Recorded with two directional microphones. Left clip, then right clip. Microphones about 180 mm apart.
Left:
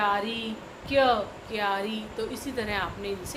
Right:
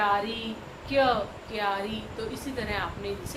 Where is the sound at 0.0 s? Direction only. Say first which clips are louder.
Right 1 dB; 45° left (ahead or behind).